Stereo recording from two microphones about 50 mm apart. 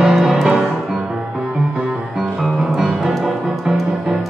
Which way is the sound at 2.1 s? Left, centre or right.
Centre.